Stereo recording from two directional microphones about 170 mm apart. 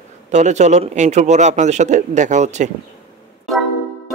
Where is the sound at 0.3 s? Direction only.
40° right (ahead or behind).